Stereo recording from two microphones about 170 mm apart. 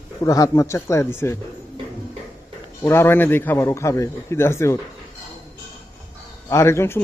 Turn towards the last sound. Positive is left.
turn(degrees=15)  # may be behind; listen again after turning